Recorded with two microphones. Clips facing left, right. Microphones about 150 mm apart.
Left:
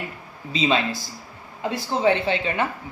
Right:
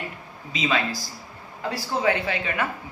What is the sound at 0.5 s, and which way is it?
Speech, 30° left (ahead or behind).